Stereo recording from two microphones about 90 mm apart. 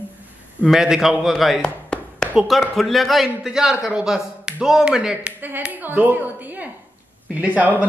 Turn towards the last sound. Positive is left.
turn(degrees=-15)  # may be behind; listen again after turning